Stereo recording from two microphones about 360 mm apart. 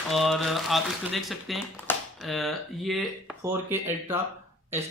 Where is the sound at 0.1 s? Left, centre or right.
Centre.